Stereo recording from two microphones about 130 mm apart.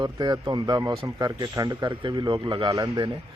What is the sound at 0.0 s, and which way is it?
Speech, 35° right (ahead or behind).